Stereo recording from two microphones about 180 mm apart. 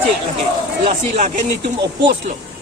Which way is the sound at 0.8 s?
40° right (ahead or behind).